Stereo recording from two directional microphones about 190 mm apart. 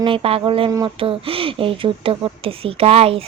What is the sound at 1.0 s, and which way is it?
A woman's voice, 30° right (ahead or behind).